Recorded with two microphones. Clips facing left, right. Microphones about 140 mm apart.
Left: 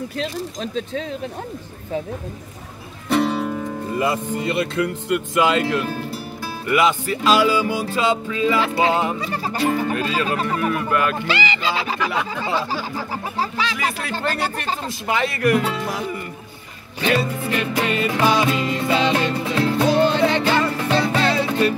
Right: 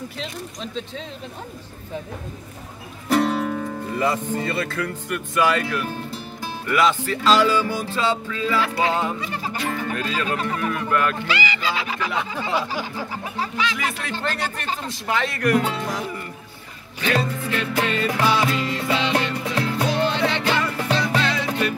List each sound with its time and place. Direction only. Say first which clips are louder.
0.2 s speech: left 8 dB; 50° left (ahead or behind)
3.1 s music: even; centre (ahead or behind)
4.4 s speech: left 4 dB; 20° left (ahead or behind)
6.7 s music: left 2 dB; 10° left (ahead or behind)
9.2 s speech: left 5 dB; 40° left (ahead or behind)
9.9 s speech: left 3 dB; 5° left (ahead or behind)
11.2 s speech: left 2 dB; 25° left (ahead or behind)
13.7 s speech: left 3 dB; centre (ahead or behind)
17.1 s music: left 2 dB; 15° left (ahead or behind)
18.5 s speech: left 3 dB; 20° left (ahead or behind)
18.9 s music: left 4 dB; 40° left (ahead or behind)